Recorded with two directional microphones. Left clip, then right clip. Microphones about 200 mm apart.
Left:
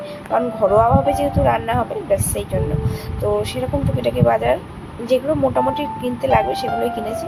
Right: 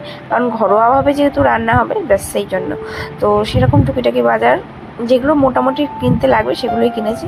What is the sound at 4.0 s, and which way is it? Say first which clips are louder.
Speech: right 4 dB; 20° right (ahead or behind).